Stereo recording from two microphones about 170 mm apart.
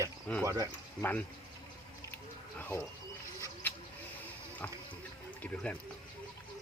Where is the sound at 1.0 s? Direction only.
10° left (ahead or behind).